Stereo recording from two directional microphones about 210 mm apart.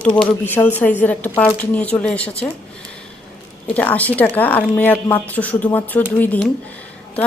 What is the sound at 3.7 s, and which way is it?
A woman's voice, 5° left (ahead or behind).